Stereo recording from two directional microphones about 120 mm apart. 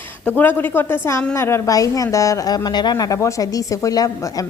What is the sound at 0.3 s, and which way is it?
A woman's voice, 15° left (ahead or behind).